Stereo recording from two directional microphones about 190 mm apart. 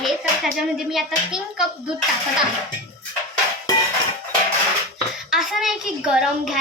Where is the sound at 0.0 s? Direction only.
Centre (ahead or behind).